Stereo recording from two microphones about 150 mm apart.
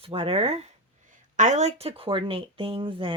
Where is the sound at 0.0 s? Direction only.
40° right (ahead or behind).